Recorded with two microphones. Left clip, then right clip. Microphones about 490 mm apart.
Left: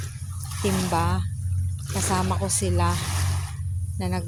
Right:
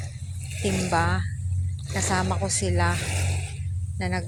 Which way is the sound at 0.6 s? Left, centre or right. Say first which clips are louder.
Even; left.